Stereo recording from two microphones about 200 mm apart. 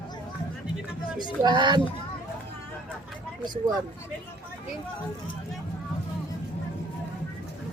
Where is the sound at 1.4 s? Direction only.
20° right (ahead or behind).